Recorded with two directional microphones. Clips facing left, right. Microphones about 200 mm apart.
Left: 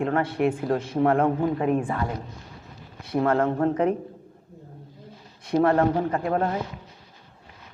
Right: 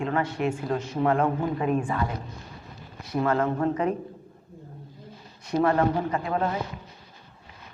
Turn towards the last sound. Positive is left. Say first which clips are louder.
# left 2 dB
turn(degrees=50)  # may be behind; listen again after turning